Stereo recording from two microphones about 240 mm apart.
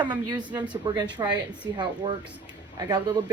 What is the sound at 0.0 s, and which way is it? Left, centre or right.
Speech, centre.